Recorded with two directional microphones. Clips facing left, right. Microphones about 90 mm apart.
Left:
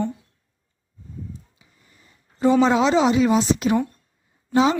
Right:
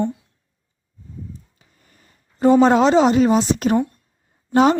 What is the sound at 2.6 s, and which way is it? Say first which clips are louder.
A woman's voice: right 4 dB; 45° right (ahead or behind).